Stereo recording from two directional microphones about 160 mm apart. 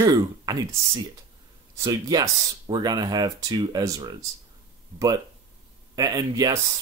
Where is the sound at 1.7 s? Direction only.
20° right (ahead or behind).